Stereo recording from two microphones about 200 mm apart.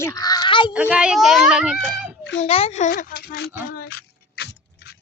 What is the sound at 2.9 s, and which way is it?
Speech, 50° left (ahead or behind).